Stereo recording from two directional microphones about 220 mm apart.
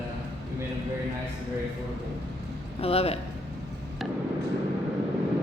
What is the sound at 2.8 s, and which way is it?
Speech, 25° left (ahead or behind).